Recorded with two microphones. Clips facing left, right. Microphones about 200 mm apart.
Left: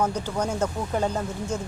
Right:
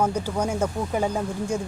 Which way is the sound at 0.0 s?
10° right (ahead or behind).